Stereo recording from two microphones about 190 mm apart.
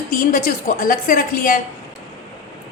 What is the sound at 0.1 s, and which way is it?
A woman's voice, 45° left (ahead or behind).